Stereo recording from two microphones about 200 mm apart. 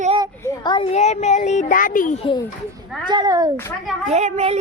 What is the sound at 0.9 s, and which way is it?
Speech, 35° left (ahead or behind).